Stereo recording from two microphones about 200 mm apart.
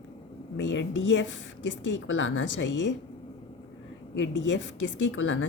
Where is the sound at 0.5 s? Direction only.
65° left (ahead or behind).